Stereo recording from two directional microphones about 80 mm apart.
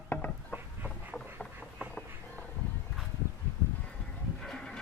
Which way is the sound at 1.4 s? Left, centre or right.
Centre.